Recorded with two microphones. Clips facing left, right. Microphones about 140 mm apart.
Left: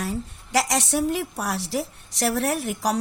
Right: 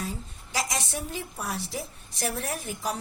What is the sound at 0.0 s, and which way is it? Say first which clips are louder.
A woman's voice: left 6 dB; 75° left (ahead or behind).